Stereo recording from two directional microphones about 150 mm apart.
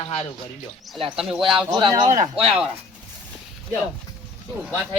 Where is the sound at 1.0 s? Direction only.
5° right (ahead or behind).